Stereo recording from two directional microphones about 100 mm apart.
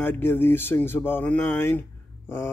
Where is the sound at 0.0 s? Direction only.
20° left (ahead or behind).